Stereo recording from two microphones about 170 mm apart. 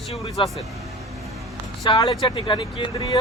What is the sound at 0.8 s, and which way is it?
Vehicle, centre (ahead or behind).